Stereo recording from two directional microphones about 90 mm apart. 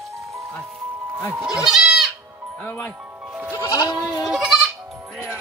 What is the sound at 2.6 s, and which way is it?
Speech, 20° left (ahead or behind).